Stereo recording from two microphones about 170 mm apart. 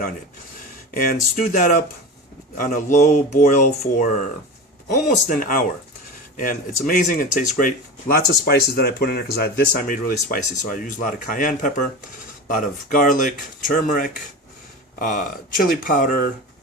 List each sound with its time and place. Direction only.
0.9 s speech: 55° left (ahead or behind)
5.3 s speech: 55° left (ahead or behind)